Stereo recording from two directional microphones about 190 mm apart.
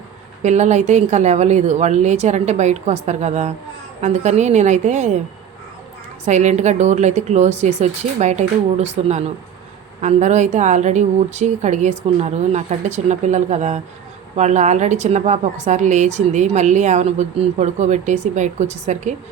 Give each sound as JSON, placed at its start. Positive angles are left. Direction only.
{"t": 0.4, "sound": "a woman's voice", "side_deg": -40}
{"t": 6.2, "sound": "a woman's voice", "side_deg": -40}